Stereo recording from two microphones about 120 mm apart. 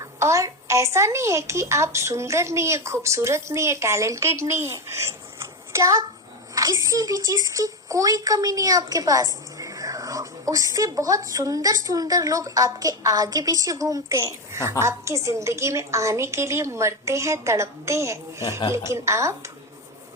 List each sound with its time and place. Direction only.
0.0 s speech: 25° right (ahead or behind)